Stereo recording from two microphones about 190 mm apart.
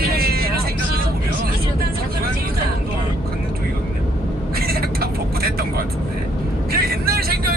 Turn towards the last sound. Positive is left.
turn(degrees=-50)  # may be behind; listen again after turning